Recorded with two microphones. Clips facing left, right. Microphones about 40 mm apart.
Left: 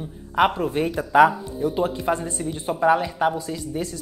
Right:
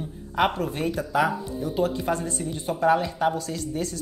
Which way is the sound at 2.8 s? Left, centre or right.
Centre.